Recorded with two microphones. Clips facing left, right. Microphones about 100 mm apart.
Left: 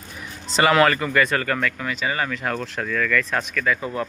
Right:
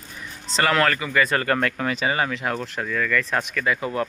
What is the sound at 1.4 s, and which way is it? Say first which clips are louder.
Speech: right 2 dB; 35° right (ahead or behind).